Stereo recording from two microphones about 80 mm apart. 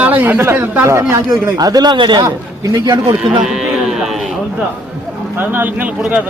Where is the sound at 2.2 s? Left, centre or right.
Right.